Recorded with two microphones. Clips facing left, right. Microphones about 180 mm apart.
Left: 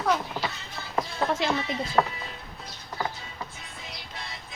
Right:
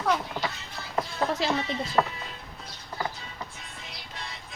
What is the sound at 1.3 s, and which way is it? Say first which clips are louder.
Speech: left 1 dB; 35° right (ahead or behind).